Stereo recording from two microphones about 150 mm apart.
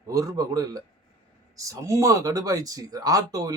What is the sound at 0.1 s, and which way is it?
Speech, 25° right (ahead or behind).